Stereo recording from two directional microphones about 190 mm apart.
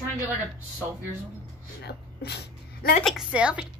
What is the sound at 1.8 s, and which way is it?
Speech, 60° left (ahead or behind).